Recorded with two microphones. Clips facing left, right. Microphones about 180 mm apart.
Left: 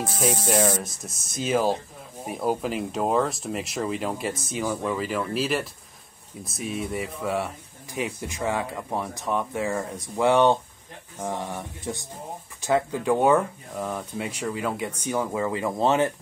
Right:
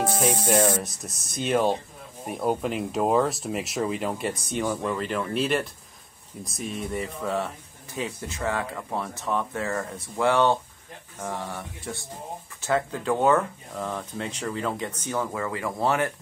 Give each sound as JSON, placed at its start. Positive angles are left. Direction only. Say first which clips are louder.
{"t": 0.7, "sound": "speech", "louder": "right 1 dB", "side_deg": -5}